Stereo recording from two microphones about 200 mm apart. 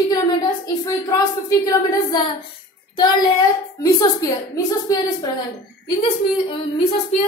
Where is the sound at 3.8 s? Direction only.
20° left (ahead or behind).